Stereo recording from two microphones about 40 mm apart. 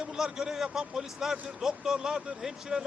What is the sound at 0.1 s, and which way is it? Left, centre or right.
A man's voice, centre.